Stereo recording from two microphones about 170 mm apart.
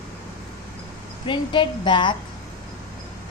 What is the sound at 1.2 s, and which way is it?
Speech, 30° left (ahead or behind).